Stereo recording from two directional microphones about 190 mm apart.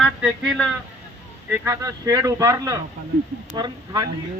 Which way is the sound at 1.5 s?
15° right (ahead or behind).